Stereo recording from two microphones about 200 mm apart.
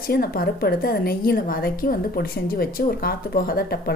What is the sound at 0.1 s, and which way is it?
A woman's voice, 50° left (ahead or behind).